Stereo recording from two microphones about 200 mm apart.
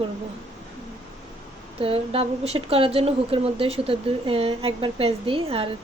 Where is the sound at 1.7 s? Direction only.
30° right (ahead or behind).